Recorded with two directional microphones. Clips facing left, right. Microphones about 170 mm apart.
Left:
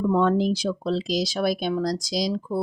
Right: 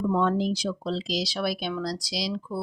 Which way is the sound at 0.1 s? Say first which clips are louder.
Left 4 dB; 55° left (ahead or behind).